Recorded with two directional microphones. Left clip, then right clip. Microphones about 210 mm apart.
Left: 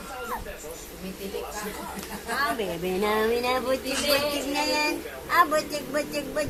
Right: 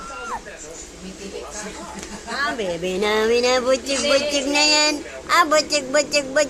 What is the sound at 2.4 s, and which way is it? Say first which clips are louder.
A woman's voice: right 5 dB; 20° right (ahead or behind).